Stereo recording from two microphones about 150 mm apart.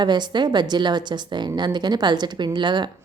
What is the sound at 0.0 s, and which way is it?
A woman's voice, 30° right (ahead or behind).